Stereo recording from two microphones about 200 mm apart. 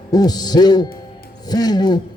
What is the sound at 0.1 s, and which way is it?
A man's voice, 20° left (ahead or behind).